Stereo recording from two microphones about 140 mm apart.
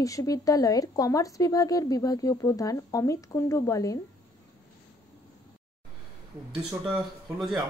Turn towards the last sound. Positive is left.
turn(degrees=0)  # may be behind; listen again after turning